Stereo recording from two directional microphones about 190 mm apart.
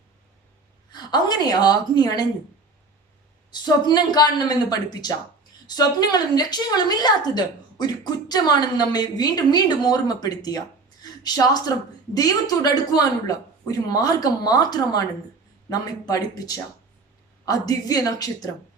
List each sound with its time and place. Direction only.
0.9 s a woman's voice: 20° left (ahead or behind)
3.5 s a woman's voice: 20° left (ahead or behind)